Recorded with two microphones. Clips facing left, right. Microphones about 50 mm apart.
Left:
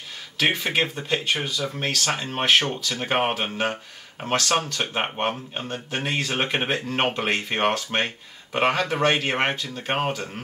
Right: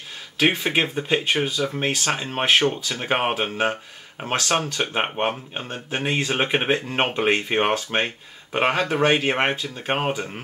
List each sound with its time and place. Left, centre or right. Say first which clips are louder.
0.4 s speech: right 2 dB; centre